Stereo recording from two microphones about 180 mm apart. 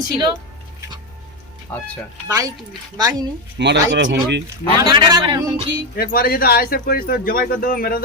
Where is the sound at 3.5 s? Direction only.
80° right.